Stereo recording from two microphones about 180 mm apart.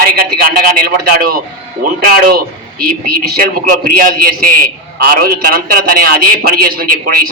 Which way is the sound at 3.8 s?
55° right (ahead or behind).